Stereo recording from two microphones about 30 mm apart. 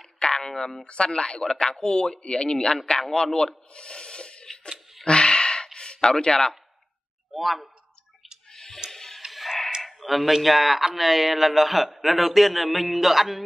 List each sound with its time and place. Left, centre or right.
0.2 s a sound: left
0.5 s speech: centre
0.8 s speech: left
3.7 s plop: left
5.0 s a sound: left
7.3 s a man's voice: centre
8.5 s music: centre
9.3 s tick-tock: centre
9.8 s a man's voice: centre